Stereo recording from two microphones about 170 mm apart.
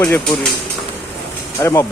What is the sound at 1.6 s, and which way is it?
Speech, 15° left (ahead or behind).